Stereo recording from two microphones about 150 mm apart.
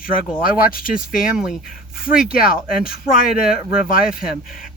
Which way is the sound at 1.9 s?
70° left (ahead or behind).